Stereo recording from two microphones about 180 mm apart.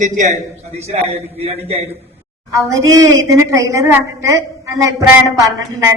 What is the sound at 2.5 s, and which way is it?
A woman's voice, 20° right (ahead or behind).